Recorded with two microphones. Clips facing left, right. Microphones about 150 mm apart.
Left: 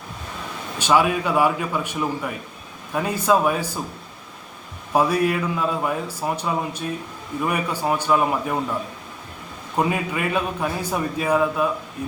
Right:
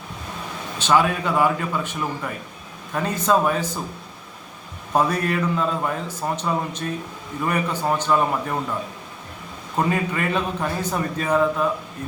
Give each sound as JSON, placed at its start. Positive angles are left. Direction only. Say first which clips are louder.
{"t": 0.8, "sound": "a man's voice", "louder": "left 1 dB", "side_deg": 10}
{"t": 4.9, "sound": "a man's voice", "louder": "left 2 dB", "side_deg": 10}
{"t": 9.7, "sound": "a man's voice", "louder": "even", "side_deg": 10}